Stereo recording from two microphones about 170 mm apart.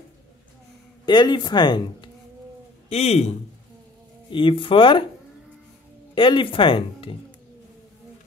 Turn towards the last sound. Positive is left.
turn(degrees=30)  # may be behind; listen again after turning